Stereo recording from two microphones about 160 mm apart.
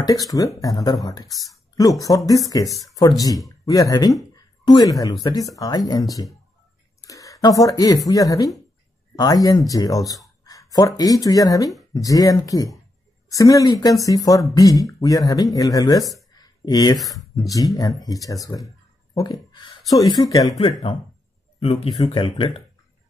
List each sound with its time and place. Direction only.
0.0 s speech: 20° left (ahead or behind)
4.4 s a sound: 25° left (ahead or behind)
5.2 s speech: 25° left (ahead or behind)
16.1 s a sound: 25° left (ahead or behind)
17.0 s speech: centre (ahead or behind)
17.4 s speech: 20° left (ahead or behind)
21.5 s speech: 40° left (ahead or behind)